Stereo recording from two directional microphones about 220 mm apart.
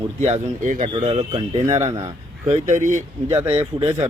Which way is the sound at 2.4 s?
30° right (ahead or behind).